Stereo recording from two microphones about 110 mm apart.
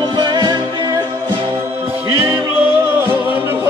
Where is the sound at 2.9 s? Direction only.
20° right (ahead or behind).